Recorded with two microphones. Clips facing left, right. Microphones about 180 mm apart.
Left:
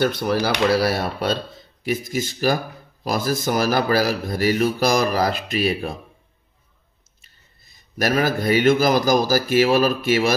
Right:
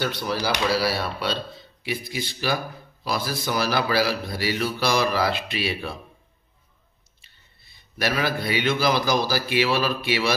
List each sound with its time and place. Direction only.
0.0 s speech: 50° left (ahead or behind)
7.2 s speech: 45° left (ahead or behind)